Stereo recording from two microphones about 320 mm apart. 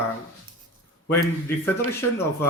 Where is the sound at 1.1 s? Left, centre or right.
Centre.